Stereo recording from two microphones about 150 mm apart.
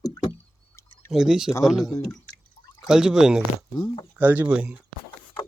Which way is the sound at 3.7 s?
30° left (ahead or behind).